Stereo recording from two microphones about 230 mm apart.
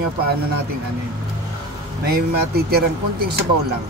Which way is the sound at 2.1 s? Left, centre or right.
Right.